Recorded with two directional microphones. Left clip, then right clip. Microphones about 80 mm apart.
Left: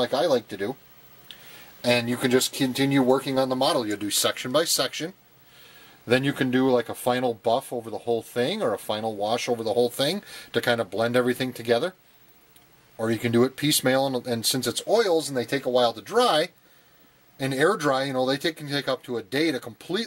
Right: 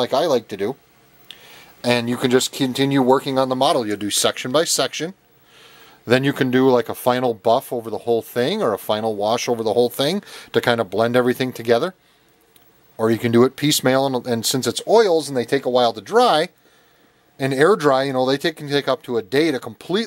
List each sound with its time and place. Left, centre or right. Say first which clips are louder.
0.0 s speech: right 4 dB; right
12.9 s speech: right 7 dB; right